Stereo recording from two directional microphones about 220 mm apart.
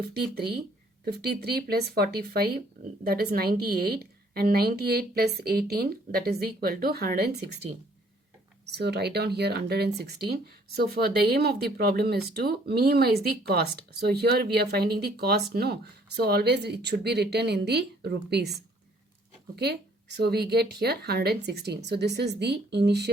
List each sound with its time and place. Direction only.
0.1 s speech: 45° right (ahead or behind)
8.6 s speech: 50° right (ahead or behind)
19.5 s speech: 45° right (ahead or behind)